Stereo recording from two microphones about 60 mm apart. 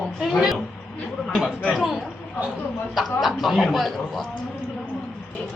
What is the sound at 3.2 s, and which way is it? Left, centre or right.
A man's voice, centre.